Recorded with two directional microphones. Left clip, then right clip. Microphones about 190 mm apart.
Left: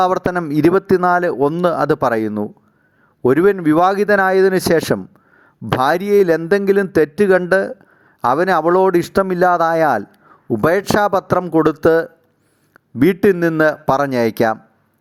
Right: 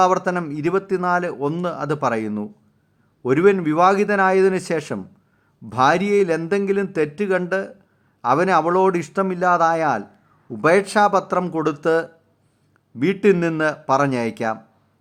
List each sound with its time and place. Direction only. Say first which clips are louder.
0.0 s speech: left 2 dB; 40° left (ahead or behind)